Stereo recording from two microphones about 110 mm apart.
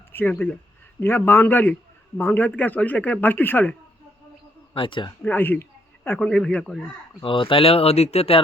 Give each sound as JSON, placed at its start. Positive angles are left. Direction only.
{"t": 0.1, "sound": "a man's voice", "side_deg": 20}
{"t": 4.7, "sound": "speech", "side_deg": 50}
{"t": 5.2, "sound": "speech", "side_deg": 20}
{"t": 7.2, "sound": "speech", "side_deg": 50}